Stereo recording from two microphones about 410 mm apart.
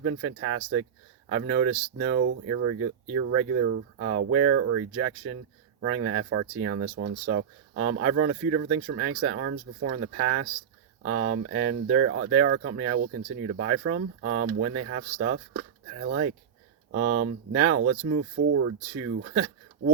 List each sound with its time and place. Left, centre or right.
0.0 s speech: right